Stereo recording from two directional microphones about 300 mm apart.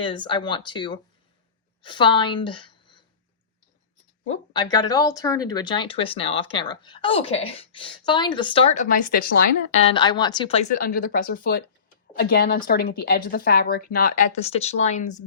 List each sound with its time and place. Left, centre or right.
0.0 s a woman's voice: centre
4.3 s speech: centre
9.9 s speech: centre
10.8 s a woman's voice: left